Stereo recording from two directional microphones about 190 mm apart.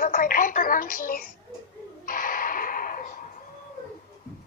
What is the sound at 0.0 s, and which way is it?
A woman's voice, 45° left (ahead or behind).